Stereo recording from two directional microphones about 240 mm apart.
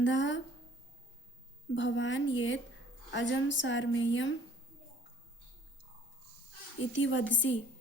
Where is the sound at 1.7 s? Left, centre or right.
Left.